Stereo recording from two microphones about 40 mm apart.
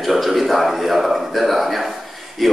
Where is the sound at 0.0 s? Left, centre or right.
Centre.